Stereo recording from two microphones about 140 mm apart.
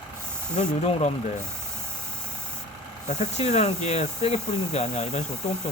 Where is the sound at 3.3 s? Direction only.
50° left (ahead or behind).